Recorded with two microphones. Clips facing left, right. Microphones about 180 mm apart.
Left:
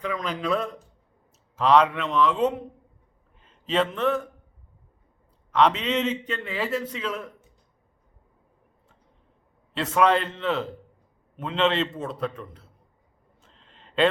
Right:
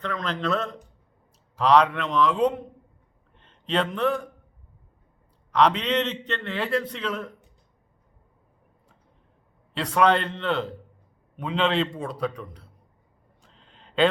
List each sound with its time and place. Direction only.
0.0 s a man's voice: 10° left (ahead or behind)
5.5 s a man's voice: 5° left (ahead or behind)
9.7 s a man's voice: 5° left (ahead or behind)
13.4 s a sound: centre (ahead or behind)